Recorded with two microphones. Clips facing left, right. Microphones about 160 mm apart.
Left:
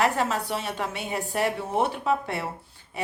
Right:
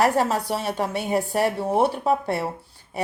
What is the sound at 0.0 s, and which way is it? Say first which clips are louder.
A woman's voice: right 4 dB; 35° right (ahead or behind).